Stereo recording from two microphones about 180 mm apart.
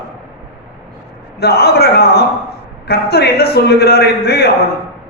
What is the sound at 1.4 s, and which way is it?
A man's voice, 60° left (ahead or behind).